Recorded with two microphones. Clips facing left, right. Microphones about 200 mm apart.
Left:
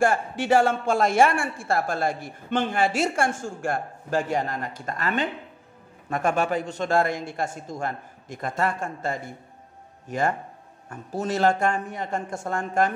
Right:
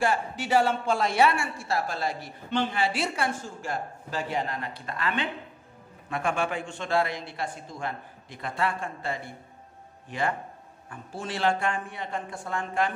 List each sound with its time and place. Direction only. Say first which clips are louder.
0.0 s a man's voice: left 4 dB; 50° left (ahead or behind)